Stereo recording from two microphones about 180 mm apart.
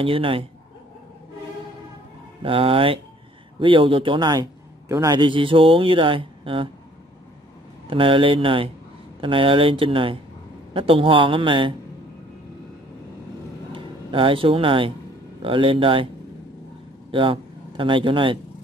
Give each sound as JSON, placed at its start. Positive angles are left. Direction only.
{"t": 0.0, "sound": "speech", "side_deg": -30}
{"t": 2.4, "sound": "a man's voice", "side_deg": -30}
{"t": 7.9, "sound": "a man's voice", "side_deg": -30}
{"t": 13.7, "sound": "a man's voice", "side_deg": -30}
{"t": 17.1, "sound": "a man's voice", "side_deg": -30}